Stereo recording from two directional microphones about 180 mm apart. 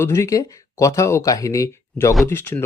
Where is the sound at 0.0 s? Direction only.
15° left (ahead or behind).